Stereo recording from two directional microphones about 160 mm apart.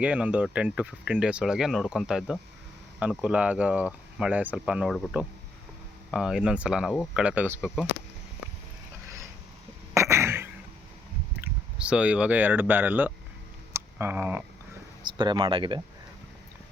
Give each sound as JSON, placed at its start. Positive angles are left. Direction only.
{"t": 0.0, "sound": "speech", "side_deg": -10}
{"t": 7.3, "sound": "speech", "side_deg": -10}
{"t": 9.9, "sound": "throat clearing", "side_deg": -15}
{"t": 11.3, "sound": "speech", "side_deg": -5}
{"t": 15.0, "sound": "speech", "side_deg": -30}